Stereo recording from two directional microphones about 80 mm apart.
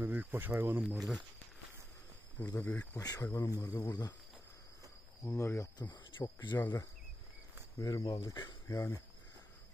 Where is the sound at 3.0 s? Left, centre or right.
Left.